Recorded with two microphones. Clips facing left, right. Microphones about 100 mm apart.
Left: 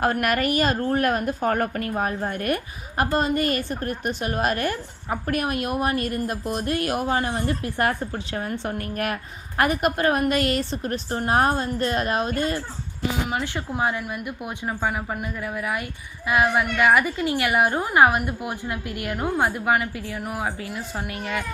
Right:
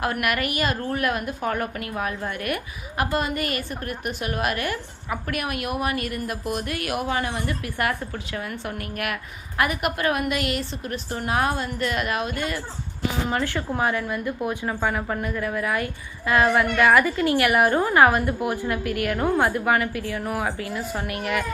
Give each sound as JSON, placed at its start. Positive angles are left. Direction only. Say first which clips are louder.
{"t": 0.0, "sound": "a woman's voice", "louder": "left 3 dB", "side_deg": 40}
{"t": 13.3, "sound": "a woman's voice", "louder": "right 2 dB", "side_deg": 20}